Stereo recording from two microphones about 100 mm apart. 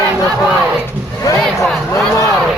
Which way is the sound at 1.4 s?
Centre (ahead or behind).